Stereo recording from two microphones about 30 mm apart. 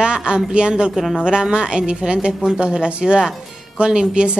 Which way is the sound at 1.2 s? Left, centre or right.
Right.